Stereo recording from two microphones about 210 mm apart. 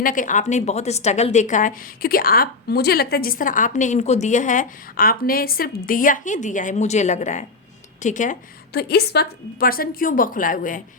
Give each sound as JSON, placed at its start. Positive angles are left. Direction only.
{"t": 0.0, "sound": "a woman's voice", "side_deg": 40}